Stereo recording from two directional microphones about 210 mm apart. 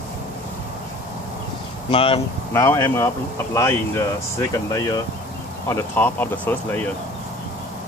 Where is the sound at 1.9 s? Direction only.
25° left (ahead or behind).